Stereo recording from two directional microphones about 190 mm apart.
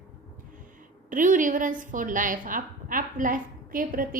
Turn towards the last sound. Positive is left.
turn(degrees=-45)  # may be behind; listen again after turning